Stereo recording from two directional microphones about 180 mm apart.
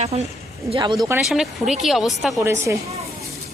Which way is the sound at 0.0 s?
35° right (ahead or behind).